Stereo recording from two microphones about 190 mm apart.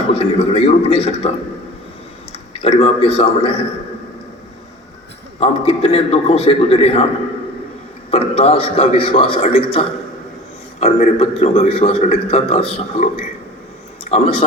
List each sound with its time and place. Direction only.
0.1 s a man's voice: 35° left (ahead or behind)
2.5 s a man's voice: 35° left (ahead or behind)
5.4 s a man's voice: 30° left (ahead or behind)
8.1 s a man's voice: 30° left (ahead or behind)
14.1 s speech: 40° left (ahead or behind)